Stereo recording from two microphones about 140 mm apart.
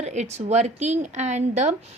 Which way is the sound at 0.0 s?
55° right (ahead or behind).